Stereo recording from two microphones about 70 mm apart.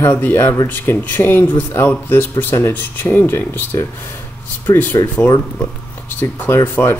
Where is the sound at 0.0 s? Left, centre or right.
Left.